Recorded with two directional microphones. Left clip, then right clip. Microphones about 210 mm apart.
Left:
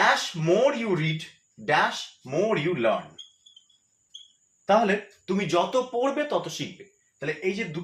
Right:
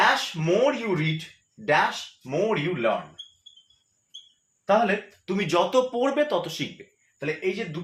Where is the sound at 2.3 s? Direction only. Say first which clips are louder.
Even; 10° right (ahead or behind).